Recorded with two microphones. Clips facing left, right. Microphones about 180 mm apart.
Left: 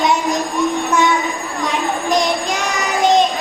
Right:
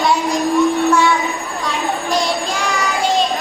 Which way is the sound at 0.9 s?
20° left (ahead or behind).